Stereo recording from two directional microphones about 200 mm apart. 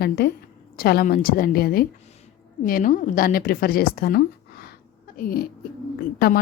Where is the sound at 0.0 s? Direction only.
55° left (ahead or behind).